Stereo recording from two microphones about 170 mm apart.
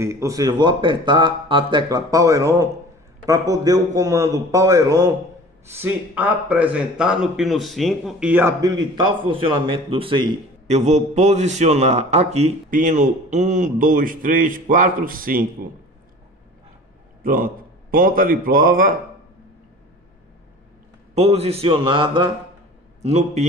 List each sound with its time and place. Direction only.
0.0 s speech: 15° right (ahead or behind)
10.7 s a man's voice: 40° right (ahead or behind)
17.2 s a man's voice: 55° right (ahead or behind)
21.1 s a man's voice: 40° right (ahead or behind)
23.0 s a man's voice: 40° right (ahead or behind)